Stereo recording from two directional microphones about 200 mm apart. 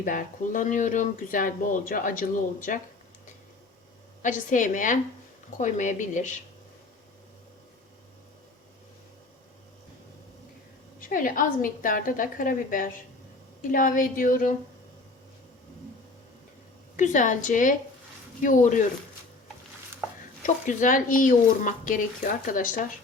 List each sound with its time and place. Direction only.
0.0 s speech: 40° left (ahead or behind)
4.2 s speech: 40° left (ahead or behind)
11.1 s a woman's voice: 45° left (ahead or behind)
17.0 s speech: 40° left (ahead or behind)
20.4 s speech: 40° left (ahead or behind)